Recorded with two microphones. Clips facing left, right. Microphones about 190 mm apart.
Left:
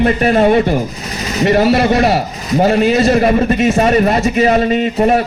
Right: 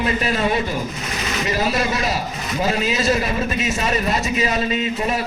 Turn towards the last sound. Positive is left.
turn(degrees=55)  # may be behind; listen again after turning